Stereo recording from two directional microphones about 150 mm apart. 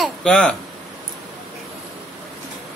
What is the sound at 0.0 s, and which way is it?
Speech, 5° left (ahead or behind).